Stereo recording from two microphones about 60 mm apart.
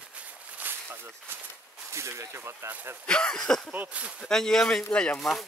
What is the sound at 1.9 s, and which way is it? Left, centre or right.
Speech, right.